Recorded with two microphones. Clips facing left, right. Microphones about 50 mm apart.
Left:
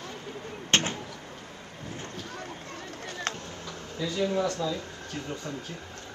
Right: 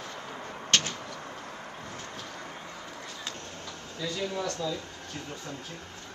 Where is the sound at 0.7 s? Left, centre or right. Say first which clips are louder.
Left 2 dB; left.